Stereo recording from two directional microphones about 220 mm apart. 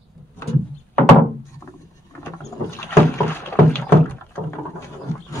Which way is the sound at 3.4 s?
10° left (ahead or behind).